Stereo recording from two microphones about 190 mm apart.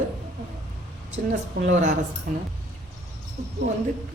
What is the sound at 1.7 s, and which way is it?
Speech, 40° right (ahead or behind).